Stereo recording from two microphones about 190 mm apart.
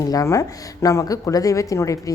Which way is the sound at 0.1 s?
15° left (ahead or behind).